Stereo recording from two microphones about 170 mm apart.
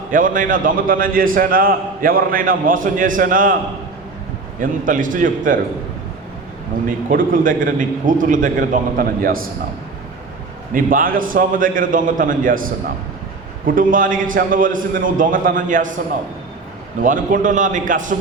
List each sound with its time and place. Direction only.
0.1 s a man's voice: 50° right (ahead or behind)
4.6 s a man's voice: 50° right (ahead or behind)
6.8 s a man's voice: 55° right (ahead or behind)
10.8 s a man's voice: 55° right (ahead or behind)
17.0 s a man's voice: 50° right (ahead or behind)